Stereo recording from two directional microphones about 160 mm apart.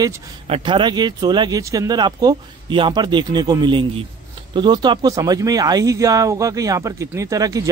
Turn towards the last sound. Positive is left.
turn(degrees=-20)  # may be behind; listen again after turning